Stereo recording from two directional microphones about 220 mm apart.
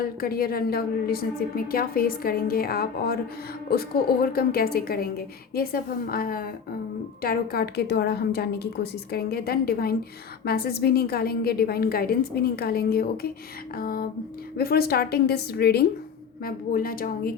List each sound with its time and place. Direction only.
0.0 s a woman's voice: 45° left (ahead or behind)